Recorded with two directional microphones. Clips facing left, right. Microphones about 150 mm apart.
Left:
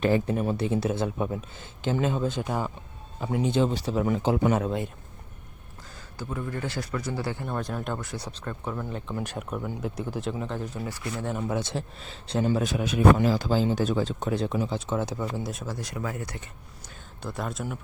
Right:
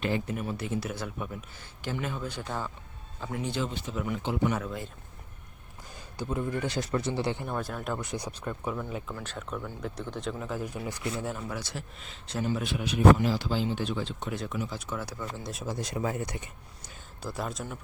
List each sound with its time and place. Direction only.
0.0 s speech: 35° left (ahead or behind)
3.7 s speech: 35° left (ahead or behind)
4.5 s speech: 25° left (ahead or behind)
6.1 s speech: 20° right (ahead or behind)
7.5 s speech: centre (ahead or behind)
8.0 s speech: 15° right (ahead or behind)
8.7 s speech: centre (ahead or behind)
9.1 s speech: 15° left (ahead or behind); by 11.3 s 15° right (ahead or behind)
11.4 s speech: 25° left (ahead or behind)
15.3 s speech: 5° left (ahead or behind)
15.6 s speech: 20° right (ahead or behind)
17.2 s speech: centre (ahead or behind)